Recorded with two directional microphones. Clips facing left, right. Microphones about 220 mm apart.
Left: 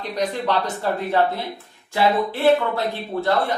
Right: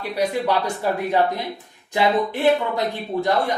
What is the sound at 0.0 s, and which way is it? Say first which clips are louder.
Speech: right 2 dB; 10° right (ahead or behind).